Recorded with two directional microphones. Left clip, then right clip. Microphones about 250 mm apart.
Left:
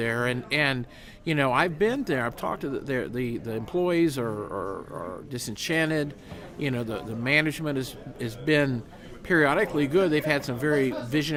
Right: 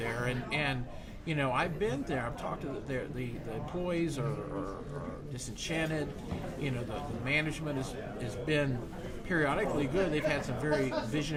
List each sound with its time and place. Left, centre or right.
0.0 s speech: left
5.3 s speech: left